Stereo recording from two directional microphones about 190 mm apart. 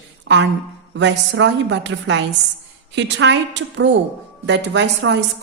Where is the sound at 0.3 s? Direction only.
65° right (ahead or behind).